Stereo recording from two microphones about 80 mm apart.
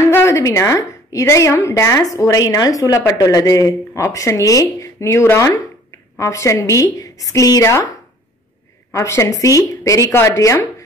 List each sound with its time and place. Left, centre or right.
0.0 s a woman's voice: left